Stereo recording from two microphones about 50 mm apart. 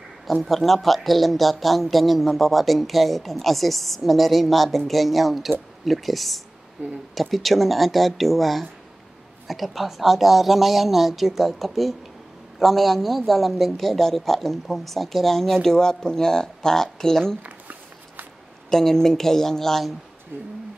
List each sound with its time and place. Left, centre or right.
0.3 s speech: centre
17.4 s a sound: right
18.7 s a woman's voice: centre
20.3 s speech: right